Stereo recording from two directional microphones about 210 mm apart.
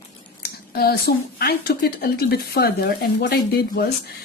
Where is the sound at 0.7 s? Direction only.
50° left (ahead or behind).